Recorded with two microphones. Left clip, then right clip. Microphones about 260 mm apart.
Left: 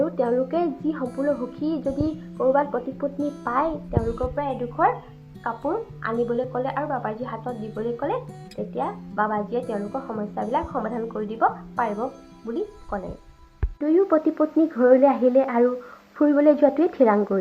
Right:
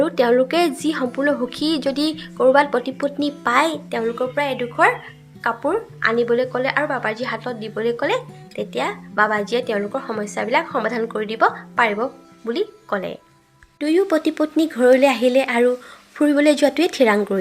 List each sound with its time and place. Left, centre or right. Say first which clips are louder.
0.0 s a sound: right 6 dB; right
0.9 s a woman's voice: right 5 dB; right
1.6 s a woman's voice: right 4 dB; right
2.0 s a woman's voice: right 7 dB; right
5.4 s a woman's voice: right 6 dB; right
13.7 s a woman's voice: right 2 dB; right